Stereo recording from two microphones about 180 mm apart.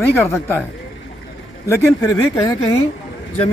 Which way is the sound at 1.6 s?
15° left (ahead or behind).